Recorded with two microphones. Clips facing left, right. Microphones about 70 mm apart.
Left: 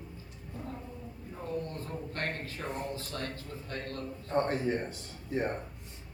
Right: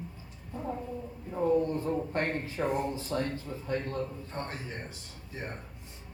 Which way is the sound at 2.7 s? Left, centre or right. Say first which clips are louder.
Right 6 dB; centre.